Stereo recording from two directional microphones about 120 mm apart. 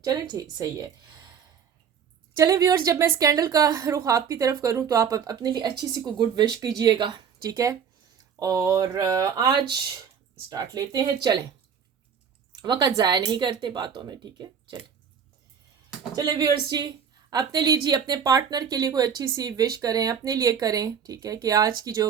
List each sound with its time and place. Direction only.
0.0 s a woman's voice: 30° right (ahead or behind)
2.3 s a woman's voice: 30° right (ahead or behind)
12.6 s a woman's voice: 40° right (ahead or behind)
16.1 s a woman's voice: 35° right (ahead or behind)